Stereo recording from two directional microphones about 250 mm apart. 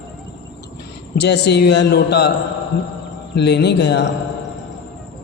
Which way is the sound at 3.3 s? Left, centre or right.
Left.